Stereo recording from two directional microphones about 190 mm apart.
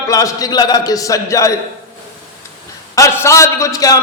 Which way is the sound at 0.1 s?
15° left (ahead or behind).